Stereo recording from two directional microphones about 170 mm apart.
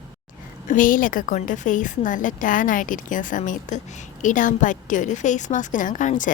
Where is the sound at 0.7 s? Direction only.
50° left (ahead or behind).